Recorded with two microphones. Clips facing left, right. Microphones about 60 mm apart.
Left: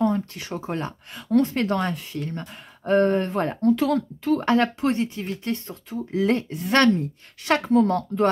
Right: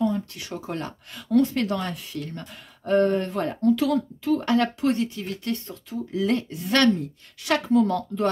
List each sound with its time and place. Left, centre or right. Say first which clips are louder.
0.0 s speech: left 2 dB; left